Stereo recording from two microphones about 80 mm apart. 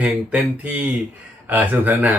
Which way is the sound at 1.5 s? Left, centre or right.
Right.